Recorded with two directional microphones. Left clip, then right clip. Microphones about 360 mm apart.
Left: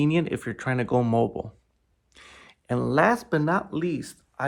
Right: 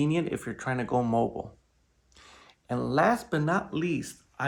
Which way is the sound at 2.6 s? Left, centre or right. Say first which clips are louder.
Left 3 dB; left.